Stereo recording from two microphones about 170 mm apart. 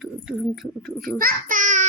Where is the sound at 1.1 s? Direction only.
55° right (ahead or behind).